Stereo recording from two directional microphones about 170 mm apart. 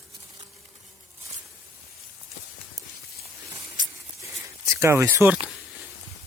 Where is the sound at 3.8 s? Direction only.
20° right (ahead or behind).